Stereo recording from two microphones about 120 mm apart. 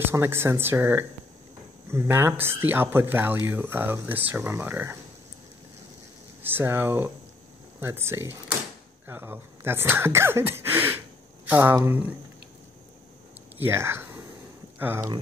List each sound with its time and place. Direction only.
0.0 s speech: 20° right (ahead or behind)
6.4 s speech: 20° right (ahead or behind)
13.6 s speech: 20° right (ahead or behind)